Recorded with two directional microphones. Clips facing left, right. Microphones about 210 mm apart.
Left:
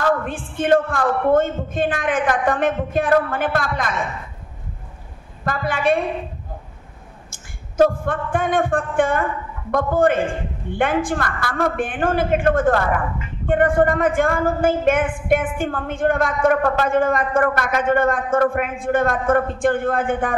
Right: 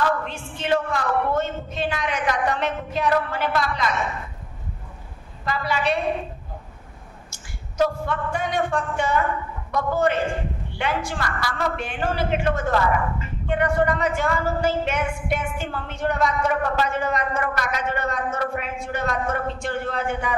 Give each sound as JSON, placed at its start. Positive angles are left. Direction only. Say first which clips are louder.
{"t": 0.2, "sound": "a woman's voice", "louder": "left 7 dB", "side_deg": 50}
{"t": 5.4, "sound": "a woman's voice", "louder": "left 3 dB", "side_deg": 50}
{"t": 7.2, "sound": "a woman's voice", "louder": "left 1 dB", "side_deg": 50}